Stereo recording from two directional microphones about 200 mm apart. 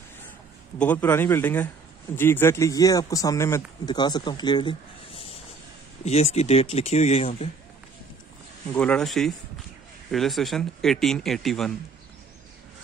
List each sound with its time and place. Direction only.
0.7 s speech: 10° left (ahead or behind); by 7.4 s 30° left (ahead or behind)
8.7 s speech: 5° left (ahead or behind)